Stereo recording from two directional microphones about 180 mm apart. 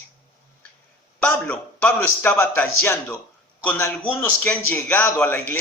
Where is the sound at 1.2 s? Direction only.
10° left (ahead or behind).